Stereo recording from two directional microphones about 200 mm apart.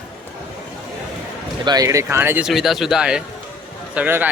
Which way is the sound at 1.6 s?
20° right (ahead or behind).